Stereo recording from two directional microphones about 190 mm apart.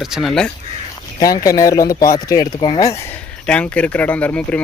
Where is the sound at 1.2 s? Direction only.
20° left (ahead or behind).